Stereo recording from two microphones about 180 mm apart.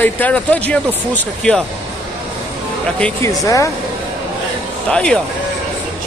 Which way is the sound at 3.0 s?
15° left (ahead or behind).